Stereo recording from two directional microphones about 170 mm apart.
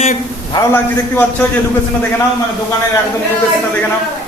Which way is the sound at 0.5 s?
10° left (ahead or behind).